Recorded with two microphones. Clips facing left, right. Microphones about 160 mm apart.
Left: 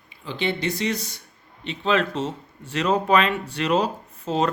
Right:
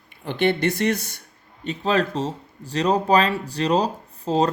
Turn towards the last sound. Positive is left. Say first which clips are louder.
# right 3 dB
turn(degrees=-35)  # may be behind; listen again after turning